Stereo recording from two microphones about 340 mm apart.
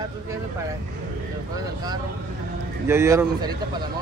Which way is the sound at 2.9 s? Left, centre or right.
Centre.